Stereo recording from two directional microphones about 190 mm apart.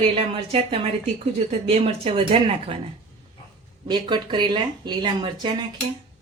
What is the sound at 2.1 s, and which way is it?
Speech, 30° right (ahead or behind).